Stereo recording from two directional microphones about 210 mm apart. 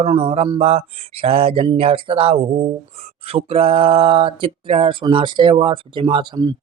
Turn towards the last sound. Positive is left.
turn(degrees=-20)  # may be behind; listen again after turning